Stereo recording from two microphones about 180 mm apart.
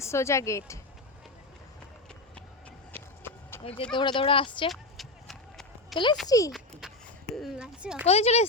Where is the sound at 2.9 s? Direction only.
10° left (ahead or behind).